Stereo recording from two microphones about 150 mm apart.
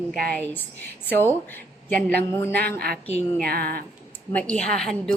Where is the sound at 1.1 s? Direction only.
15° left (ahead or behind).